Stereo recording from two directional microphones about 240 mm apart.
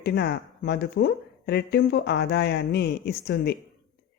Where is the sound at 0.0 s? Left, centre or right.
Left.